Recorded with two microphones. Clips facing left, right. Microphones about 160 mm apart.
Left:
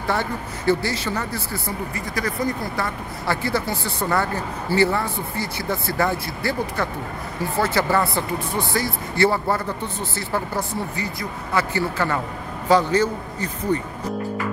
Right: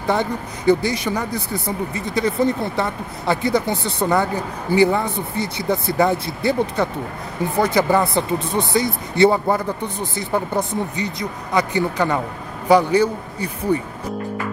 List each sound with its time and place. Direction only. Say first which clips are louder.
0.0 s speech: right 4 dB; 20° right (ahead or behind)